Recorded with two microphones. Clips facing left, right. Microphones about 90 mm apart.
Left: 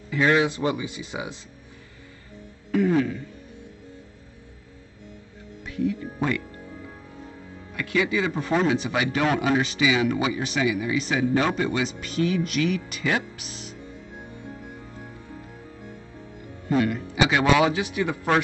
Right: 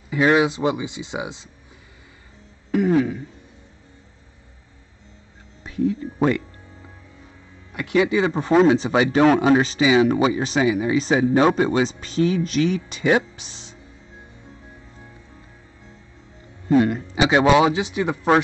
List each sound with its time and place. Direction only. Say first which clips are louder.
0.1 s speech: right 3 dB; 20° right (ahead or behind)
2.7 s speech: right 3 dB; 20° right (ahead or behind)
5.6 s speech: right 4 dB; 30° right (ahead or behind)
7.7 s speech: right 5 dB; 25° right (ahead or behind)
16.8 s speech: right 3 dB; 30° right (ahead or behind)